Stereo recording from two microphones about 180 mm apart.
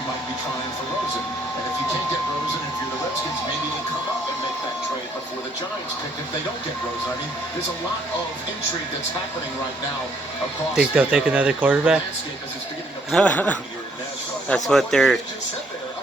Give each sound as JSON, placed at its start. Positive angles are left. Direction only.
{"t": 10.8, "sound": "speech", "side_deg": -5}
{"t": 13.1, "sound": "speech", "side_deg": 5}